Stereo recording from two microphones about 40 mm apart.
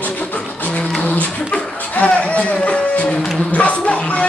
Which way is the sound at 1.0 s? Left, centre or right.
Left.